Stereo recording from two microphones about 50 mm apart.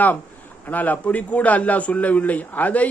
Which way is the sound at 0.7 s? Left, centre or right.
Left.